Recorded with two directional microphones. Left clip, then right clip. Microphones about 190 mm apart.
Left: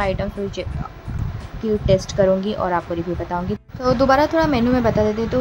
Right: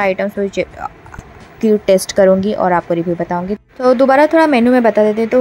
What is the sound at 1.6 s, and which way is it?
A woman's voice, 40° right (ahead or behind).